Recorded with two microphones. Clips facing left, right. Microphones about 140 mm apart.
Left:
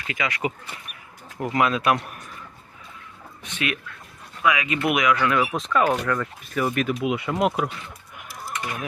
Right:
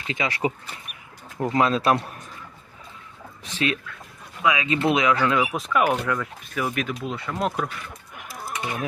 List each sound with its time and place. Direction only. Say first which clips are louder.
0.1 s speech: right 2 dB; 30° right (ahead or behind)
3.4 s speech: right 3 dB; 35° right (ahead or behind)
5.4 s speech: even; 10° right (ahead or behind)
6.1 s speech: left 2 dB; centre (ahead or behind)
8.6 s speech: right 3 dB; 25° right (ahead or behind)